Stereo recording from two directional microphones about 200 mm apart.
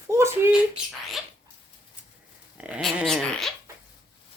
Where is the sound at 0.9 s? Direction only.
Centre (ahead or behind).